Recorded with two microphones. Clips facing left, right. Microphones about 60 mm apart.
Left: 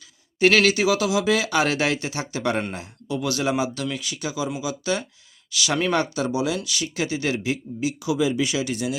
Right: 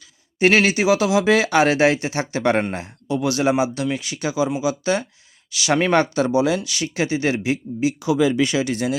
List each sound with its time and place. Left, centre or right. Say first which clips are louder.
0.3 s speech: right 1 dB; right
8.3 s speech: right 4 dB; right
8.5 s speech: right 4 dB; right